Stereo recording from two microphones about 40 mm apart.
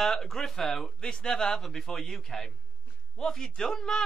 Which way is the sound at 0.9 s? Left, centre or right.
Left.